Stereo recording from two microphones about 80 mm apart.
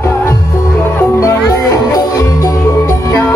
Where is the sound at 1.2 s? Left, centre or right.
Left.